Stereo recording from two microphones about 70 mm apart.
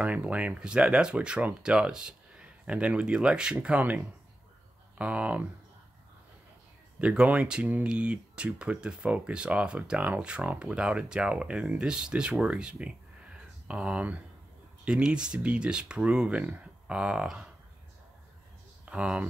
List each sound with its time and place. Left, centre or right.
0.0 s speech: centre
7.0 s speech: centre
18.9 s speech: centre